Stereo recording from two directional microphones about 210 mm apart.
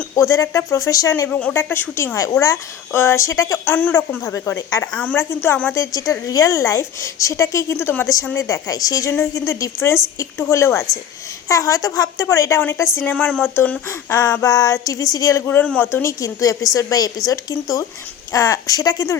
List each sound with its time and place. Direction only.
0.2 s speech: 15° left (ahead or behind)